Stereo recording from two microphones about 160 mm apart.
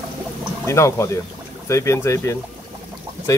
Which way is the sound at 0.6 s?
20° left (ahead or behind).